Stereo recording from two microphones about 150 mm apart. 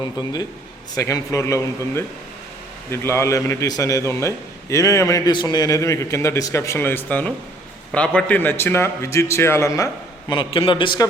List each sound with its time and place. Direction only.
0.0 s a man's voice: 25° left (ahead or behind)